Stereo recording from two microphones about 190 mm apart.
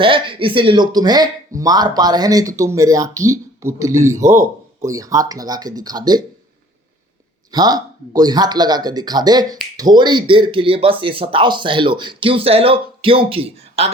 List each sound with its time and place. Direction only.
0.0 s speech: 25° right (ahead or behind)
7.5 s speech: 20° right (ahead or behind)